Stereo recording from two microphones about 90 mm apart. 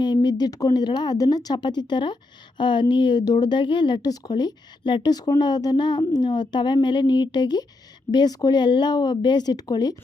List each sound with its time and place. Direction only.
0.0 s speech: 55° left (ahead or behind)